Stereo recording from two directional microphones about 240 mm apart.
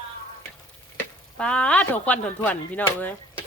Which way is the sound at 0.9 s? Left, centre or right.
Centre.